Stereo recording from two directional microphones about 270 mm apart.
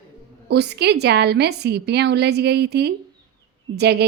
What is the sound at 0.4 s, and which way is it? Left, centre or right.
A woman's voice, right.